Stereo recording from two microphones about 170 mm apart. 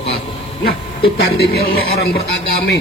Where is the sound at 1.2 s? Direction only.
70° left (ahead or behind).